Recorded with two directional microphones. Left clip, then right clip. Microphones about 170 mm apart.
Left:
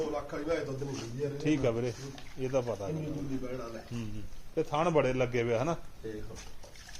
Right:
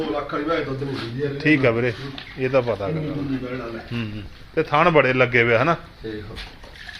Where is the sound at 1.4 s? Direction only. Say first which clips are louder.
Right 13 dB; 5° left (ahead or behind).